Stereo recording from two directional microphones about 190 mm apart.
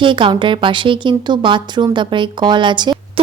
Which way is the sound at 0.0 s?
25° right (ahead or behind).